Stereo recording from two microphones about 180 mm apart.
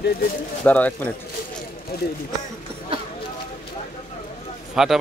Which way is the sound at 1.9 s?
55° left (ahead or behind).